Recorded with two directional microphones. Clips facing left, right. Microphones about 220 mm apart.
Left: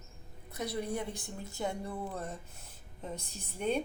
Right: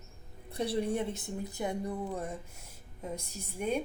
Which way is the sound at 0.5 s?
30° right (ahead or behind).